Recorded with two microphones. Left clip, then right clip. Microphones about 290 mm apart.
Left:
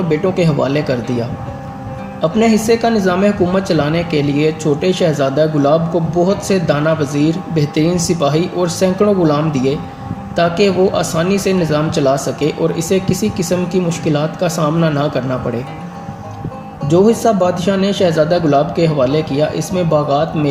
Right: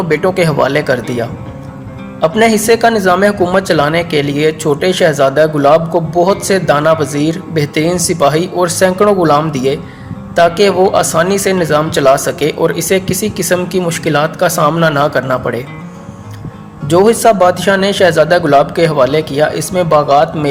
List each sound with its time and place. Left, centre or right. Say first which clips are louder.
0.1 s speech: right 4 dB; right
2.2 s speech: right 4 dB; right
16.9 s speech: right 4 dB; right